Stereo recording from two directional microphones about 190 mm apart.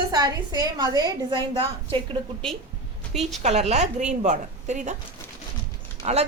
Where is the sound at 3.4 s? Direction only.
35° right (ahead or behind).